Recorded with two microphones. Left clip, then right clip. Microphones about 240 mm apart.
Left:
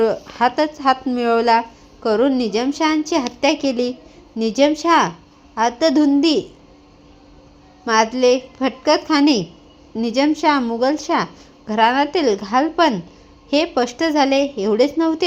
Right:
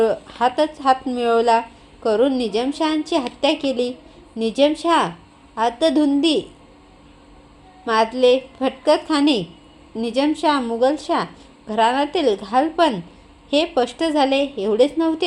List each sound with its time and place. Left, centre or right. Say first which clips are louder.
0.0 s a woman's voice: left 1 dB; left
7.9 s a woman's voice: left 1 dB; left